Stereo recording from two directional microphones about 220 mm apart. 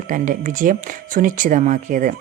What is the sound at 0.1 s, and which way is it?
Speech, 35° right (ahead or behind).